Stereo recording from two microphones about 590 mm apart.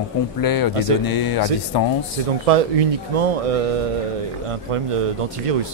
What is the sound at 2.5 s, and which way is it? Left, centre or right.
Speech, right.